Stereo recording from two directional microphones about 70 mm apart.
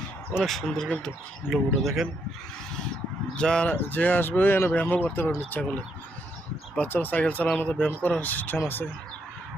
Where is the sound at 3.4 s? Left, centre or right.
Centre.